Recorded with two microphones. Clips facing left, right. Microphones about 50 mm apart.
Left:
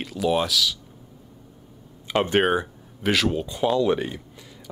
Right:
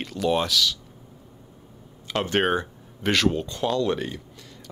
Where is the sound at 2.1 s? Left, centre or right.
Centre.